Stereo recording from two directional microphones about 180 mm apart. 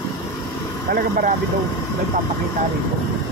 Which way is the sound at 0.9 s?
55° right (ahead or behind).